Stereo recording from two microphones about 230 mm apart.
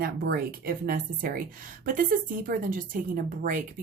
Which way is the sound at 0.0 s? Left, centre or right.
Right.